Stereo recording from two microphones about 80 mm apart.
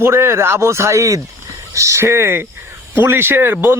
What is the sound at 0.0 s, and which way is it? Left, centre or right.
Speech, right.